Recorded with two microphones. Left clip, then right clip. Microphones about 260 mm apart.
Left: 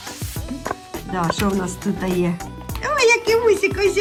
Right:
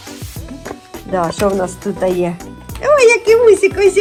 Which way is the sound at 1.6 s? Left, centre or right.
Centre.